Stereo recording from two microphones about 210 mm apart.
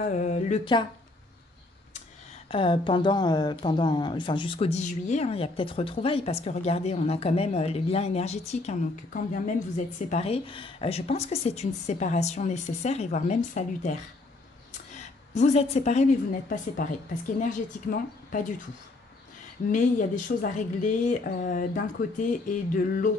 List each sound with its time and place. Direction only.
0.0 s speech: 35° left (ahead or behind)
2.4 s speech: 25° left (ahead or behind)
15.0 s a woman's voice: 35° left (ahead or behind)
19.7 s speech: 40° left (ahead or behind)